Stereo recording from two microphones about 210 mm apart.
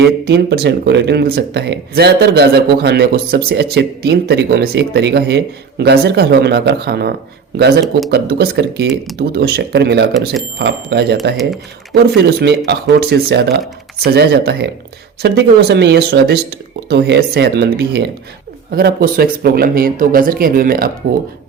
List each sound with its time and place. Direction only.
0.3 s speech: 50° right (ahead or behind)
11.3 s speech: centre (ahead or behind)
12.4 s speech: 50° right (ahead or behind)